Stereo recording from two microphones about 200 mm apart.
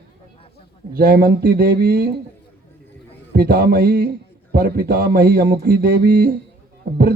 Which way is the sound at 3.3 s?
50° right (ahead or behind).